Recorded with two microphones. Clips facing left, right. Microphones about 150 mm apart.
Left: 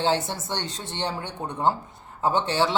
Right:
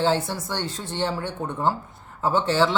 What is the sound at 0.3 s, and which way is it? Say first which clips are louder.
Speech: right 2 dB; 20° left (ahead or behind).